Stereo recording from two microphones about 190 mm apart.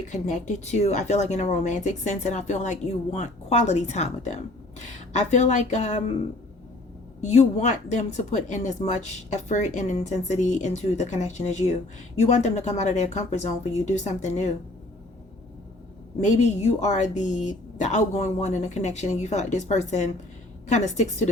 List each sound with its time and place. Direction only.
0.1 s speech: 40° left (ahead or behind)
7.2 s speech: 35° left (ahead or behind)
16.2 s speech: 35° left (ahead or behind)